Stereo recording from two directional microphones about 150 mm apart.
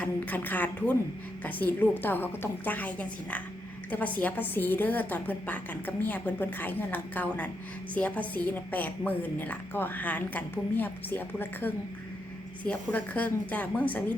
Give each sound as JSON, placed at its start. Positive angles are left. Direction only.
{"t": 0.0, "sound": "a woman's voice", "side_deg": 10}